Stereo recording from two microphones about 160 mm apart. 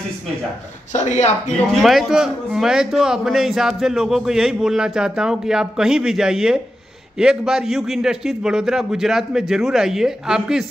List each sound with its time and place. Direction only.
0.9 s speech: 50° left (ahead or behind)
1.7 s a man's voice: centre (ahead or behind)